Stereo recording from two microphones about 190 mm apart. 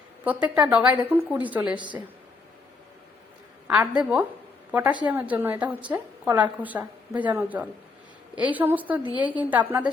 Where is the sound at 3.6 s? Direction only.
10° right (ahead or behind).